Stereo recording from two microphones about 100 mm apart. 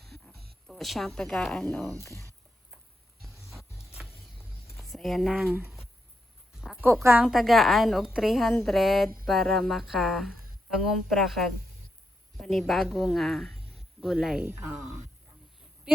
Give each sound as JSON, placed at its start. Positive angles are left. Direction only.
{"t": 0.0, "sound": "a sound", "side_deg": 5}
{"t": 1.7, "sound": "a woman's voice", "side_deg": 0}
{"t": 2.0, "sound": "speech", "side_deg": 30}
{"t": 3.6, "sound": "a sound", "side_deg": 30}
{"t": 3.9, "sound": "music", "side_deg": 0}
{"t": 4.8, "sound": "speech", "side_deg": 0}
{"t": 5.6, "sound": "a sound", "side_deg": 0}
{"t": 7.2, "sound": "a woman's voice", "side_deg": -5}
{"t": 13.7, "sound": "cricket", "side_deg": 0}
{"t": 14.4, "sound": "speech", "side_deg": -25}